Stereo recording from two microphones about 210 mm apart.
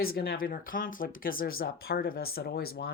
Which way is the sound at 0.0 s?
45° left (ahead or behind).